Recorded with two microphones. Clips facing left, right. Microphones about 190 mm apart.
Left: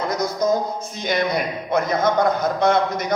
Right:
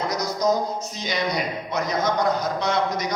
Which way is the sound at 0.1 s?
55° left (ahead or behind).